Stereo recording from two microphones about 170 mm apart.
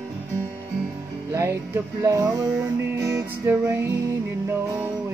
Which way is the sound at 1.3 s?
15° right (ahead or behind).